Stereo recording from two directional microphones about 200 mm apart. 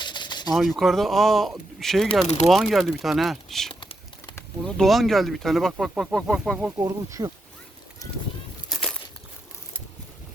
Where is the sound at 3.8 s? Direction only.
20° left (ahead or behind).